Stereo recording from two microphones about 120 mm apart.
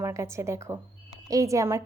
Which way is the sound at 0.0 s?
25° right (ahead or behind).